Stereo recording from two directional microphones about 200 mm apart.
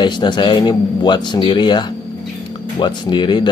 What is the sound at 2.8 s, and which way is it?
Speech, 25° left (ahead or behind).